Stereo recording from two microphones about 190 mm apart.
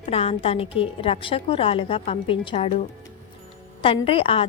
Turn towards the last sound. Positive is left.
turn(degrees=30)  # may be behind; listen again after turning